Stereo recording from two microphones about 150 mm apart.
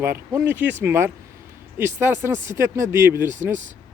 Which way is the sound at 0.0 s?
15° right (ahead or behind).